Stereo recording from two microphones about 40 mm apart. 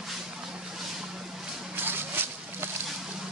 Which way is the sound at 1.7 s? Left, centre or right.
Right.